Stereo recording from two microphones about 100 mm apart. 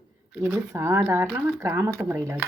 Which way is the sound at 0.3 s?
20° right (ahead or behind).